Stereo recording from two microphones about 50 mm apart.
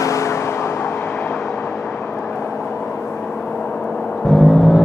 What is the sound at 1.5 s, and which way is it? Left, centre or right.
Vehicle, left.